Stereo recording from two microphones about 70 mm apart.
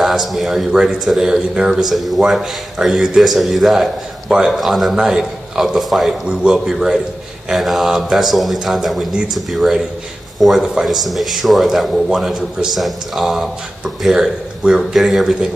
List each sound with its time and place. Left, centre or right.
0.0 s speech: centre
6.2 s a man's voice: centre
9.1 s a man's voice: centre